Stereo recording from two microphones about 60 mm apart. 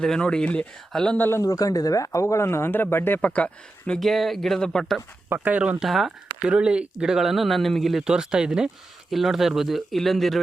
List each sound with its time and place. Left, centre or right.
0.0 s speech: centre
0.9 s speech: centre
1.4 s speech: left
2.2 s speech: left
3.2 s speech: left
4.0 s speech: centre
5.3 s speech: right
5.8 s speech: centre
6.5 s speech: centre
8.0 s speech: centre